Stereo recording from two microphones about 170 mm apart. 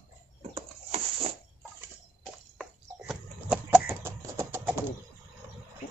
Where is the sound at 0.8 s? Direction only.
40° right (ahead or behind).